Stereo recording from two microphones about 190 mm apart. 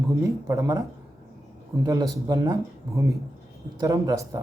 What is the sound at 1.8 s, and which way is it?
Speech, 20° right (ahead or behind).